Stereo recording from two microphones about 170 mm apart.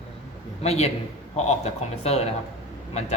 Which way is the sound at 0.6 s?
40° left (ahead or behind).